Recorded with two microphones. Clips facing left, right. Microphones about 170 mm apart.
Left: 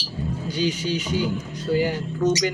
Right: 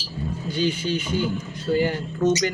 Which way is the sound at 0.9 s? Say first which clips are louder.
Even; 50° right (ahead or behind).